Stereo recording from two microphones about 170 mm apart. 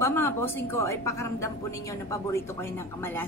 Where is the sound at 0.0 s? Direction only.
15° left (ahead or behind).